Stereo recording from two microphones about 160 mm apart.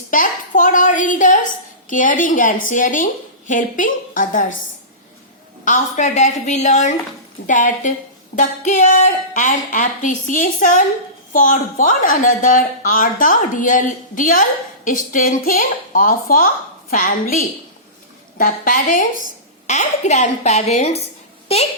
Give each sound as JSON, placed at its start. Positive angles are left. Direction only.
{"t": 0.1, "sound": "a woman's voice", "side_deg": 55}
{"t": 5.6, "sound": "a woman's voice", "side_deg": 50}
{"t": 18.3, "sound": "a woman's voice", "side_deg": 60}
{"t": 19.6, "sound": "a child's voice", "side_deg": 45}